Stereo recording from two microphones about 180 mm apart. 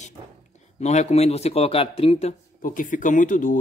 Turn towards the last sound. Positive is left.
turn(degrees=45)  # may be behind; listen again after turning